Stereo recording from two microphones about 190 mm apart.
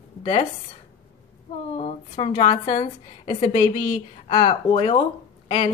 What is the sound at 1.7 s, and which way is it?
A woman's voice, 35° left (ahead or behind).